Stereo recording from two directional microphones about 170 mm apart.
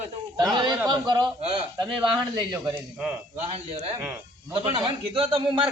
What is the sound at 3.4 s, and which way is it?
A man's voice, 40° right (ahead or behind).